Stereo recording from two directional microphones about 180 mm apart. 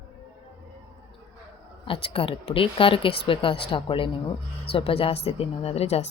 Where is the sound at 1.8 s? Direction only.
30° left (ahead or behind).